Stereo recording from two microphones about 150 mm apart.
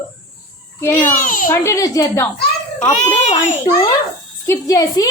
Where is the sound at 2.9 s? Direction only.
55° left (ahead or behind).